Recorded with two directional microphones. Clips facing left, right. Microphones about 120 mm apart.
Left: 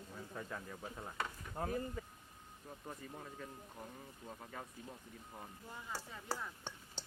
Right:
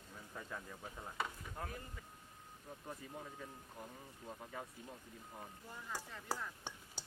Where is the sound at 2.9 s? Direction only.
Centre (ahead or behind).